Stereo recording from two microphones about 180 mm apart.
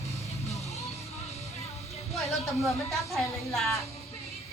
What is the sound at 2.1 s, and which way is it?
Speech, centre (ahead or behind).